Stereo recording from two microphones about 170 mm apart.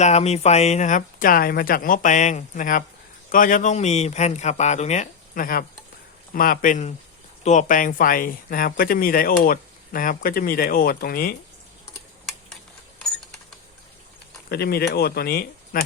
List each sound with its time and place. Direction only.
0.0 s speech: 40° left (ahead or behind); by 11.3 s 60° left (ahead or behind)
14.5 s speech: 70° left (ahead or behind)